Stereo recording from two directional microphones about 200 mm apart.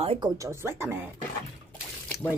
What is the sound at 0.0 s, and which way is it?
Speech, 25° right (ahead or behind).